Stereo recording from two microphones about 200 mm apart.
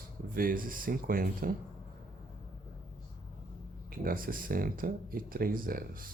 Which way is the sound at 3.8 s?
45° right (ahead or behind).